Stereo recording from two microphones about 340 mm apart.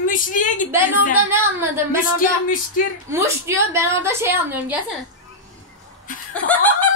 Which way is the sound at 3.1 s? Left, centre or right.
Centre.